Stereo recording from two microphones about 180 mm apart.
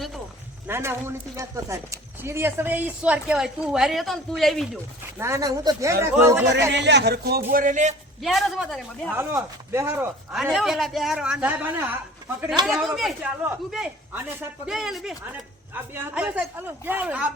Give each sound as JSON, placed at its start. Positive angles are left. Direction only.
{"t": 0.7, "sound": "speech", "side_deg": -15}
{"t": 5.1, "sound": "speech", "side_deg": -15}
{"t": 6.7, "sound": "speech", "side_deg": -70}
{"t": 8.2, "sound": "a man's voice", "side_deg": 0}
{"t": 9.1, "sound": "speech", "side_deg": -15}
{"t": 10.3, "sound": "a man's voice", "side_deg": 0}
{"t": 14.8, "sound": "a man's voice", "side_deg": 0}